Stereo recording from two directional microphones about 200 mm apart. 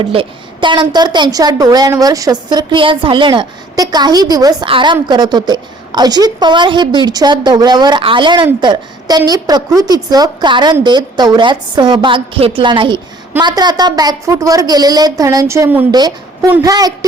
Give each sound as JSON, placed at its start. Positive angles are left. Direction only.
{"t": 0.0, "sound": "a woman's voice", "side_deg": -25}